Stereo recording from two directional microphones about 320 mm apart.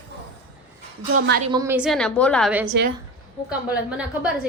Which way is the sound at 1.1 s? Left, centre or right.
Right.